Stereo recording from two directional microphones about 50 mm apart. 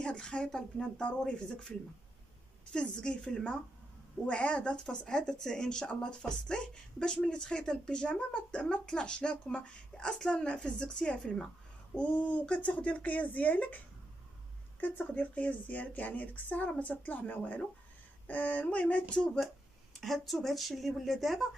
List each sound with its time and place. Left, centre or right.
0.0 s speech: centre
2.7 s a woman's voice: centre
19.9 s speech: centre